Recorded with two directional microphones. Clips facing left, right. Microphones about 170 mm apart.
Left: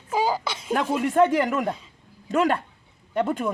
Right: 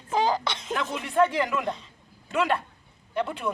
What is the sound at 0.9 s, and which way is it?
Speech, 45° left (ahead or behind).